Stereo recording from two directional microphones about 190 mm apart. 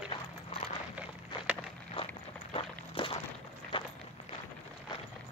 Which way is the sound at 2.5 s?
30° left (ahead or behind).